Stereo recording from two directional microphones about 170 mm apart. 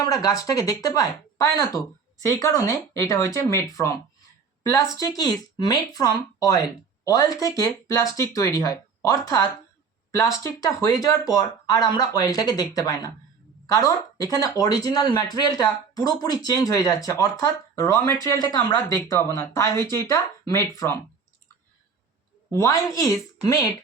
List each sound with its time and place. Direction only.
0.0 s speech: 20° left (ahead or behind)
22.5 s speech: 20° left (ahead or behind)